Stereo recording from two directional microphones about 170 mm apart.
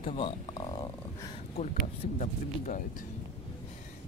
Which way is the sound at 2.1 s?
50° left (ahead or behind).